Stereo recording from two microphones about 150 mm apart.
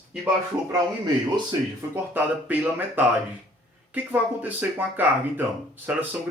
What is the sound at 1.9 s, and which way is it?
Speech, 10° right (ahead or behind).